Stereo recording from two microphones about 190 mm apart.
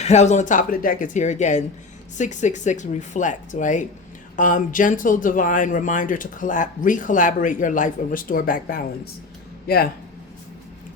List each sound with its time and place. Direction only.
0.0 s speech: 35° left (ahead or behind); by 9.9 s 55° left (ahead or behind)